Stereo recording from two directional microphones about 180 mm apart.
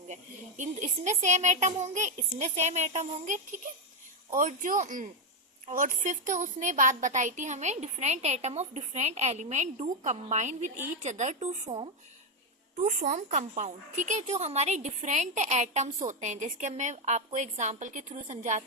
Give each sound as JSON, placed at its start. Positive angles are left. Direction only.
{"t": 0.1, "sound": "a woman's voice", "side_deg": -40}